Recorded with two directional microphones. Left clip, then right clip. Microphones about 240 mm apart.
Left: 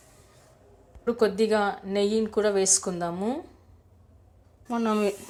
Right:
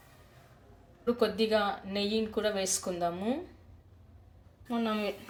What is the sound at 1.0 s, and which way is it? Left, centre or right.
Speech, left.